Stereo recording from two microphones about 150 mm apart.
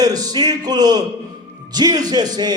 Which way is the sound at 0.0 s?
25° right (ahead or behind).